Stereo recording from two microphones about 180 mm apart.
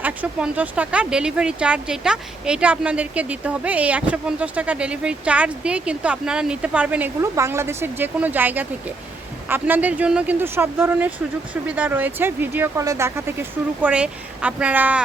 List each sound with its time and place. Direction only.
0.0 s speech: 5° right (ahead or behind)